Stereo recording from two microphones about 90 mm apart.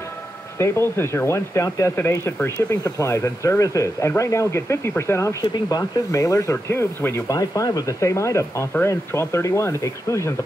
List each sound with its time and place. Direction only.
0.6 s speech: 30° left (ahead or behind)
5.4 s speech: 45° left (ahead or behind); by 7.2 s 25° left (ahead or behind)
7.2 s speech: 40° left (ahead or behind)